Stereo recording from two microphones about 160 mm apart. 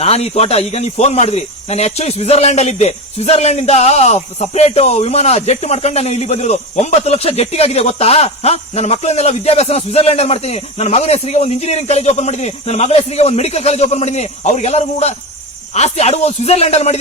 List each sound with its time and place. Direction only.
0.0 s speech: 40° left (ahead or behind)